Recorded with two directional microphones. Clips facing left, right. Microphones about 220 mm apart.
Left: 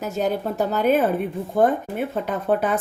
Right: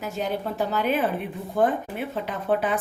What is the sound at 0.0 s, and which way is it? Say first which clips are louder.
Speech: left 5 dB; 45° left (ahead or behind).